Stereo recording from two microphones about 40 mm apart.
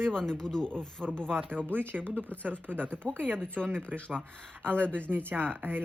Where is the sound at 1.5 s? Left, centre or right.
Right.